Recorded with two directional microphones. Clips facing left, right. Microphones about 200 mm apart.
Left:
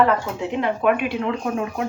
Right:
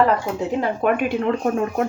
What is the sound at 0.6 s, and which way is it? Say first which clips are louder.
Speech: left 1 dB; 45° right (ahead or behind).